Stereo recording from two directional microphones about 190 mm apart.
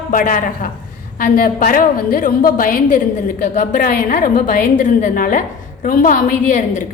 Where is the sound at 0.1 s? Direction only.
45° left (ahead or behind).